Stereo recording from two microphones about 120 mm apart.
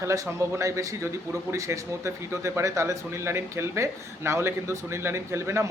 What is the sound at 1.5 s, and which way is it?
A man's voice, 25° right (ahead or behind).